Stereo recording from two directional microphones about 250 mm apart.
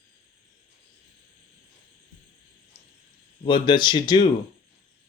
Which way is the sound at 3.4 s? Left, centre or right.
Centre.